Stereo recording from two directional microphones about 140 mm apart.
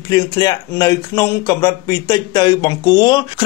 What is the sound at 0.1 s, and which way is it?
A man's voice, 25° left (ahead or behind).